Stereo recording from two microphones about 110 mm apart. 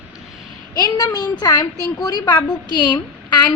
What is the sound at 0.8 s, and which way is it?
A woman's voice, 35° left (ahead or behind).